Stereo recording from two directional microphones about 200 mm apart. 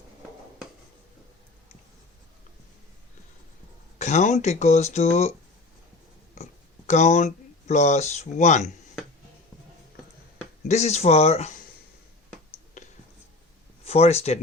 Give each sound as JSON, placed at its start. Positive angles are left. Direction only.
{"t": 3.9, "sound": "speech", "side_deg": 35}
{"t": 6.3, "sound": "a sound", "side_deg": 35}
{"t": 7.7, "sound": "speech", "side_deg": 35}
{"t": 10.7, "sound": "speech", "side_deg": 35}
{"t": 13.8, "sound": "speech", "side_deg": 30}